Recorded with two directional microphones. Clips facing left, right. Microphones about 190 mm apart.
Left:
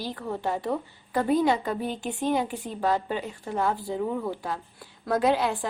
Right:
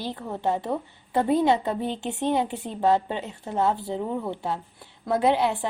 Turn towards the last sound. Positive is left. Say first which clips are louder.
# right 1 dB
turn(degrees=-25)  # may be behind; listen again after turning